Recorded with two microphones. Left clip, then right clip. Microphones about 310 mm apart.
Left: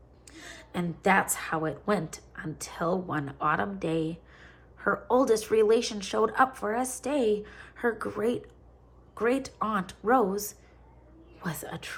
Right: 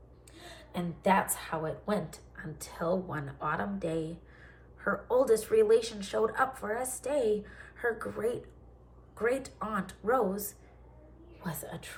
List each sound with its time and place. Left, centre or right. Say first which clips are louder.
0.7 s speech: left 3 dB; left